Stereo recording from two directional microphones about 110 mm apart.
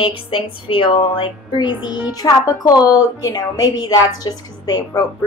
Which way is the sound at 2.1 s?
30° left (ahead or behind).